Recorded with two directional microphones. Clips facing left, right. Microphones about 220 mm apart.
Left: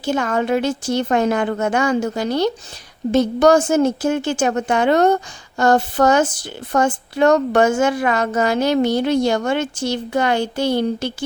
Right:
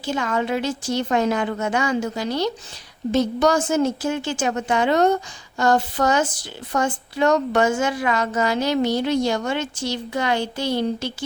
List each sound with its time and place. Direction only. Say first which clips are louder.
0.0 s a woman's voice: left 4 dB; 50° left (ahead or behind)